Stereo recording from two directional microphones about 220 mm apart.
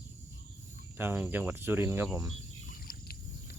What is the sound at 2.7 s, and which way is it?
Rowboat, 40° left (ahead or behind).